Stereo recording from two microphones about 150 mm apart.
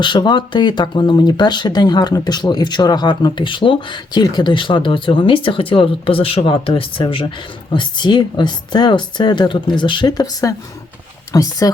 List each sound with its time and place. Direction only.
0.0 s a woman's voice: 30° left (ahead or behind)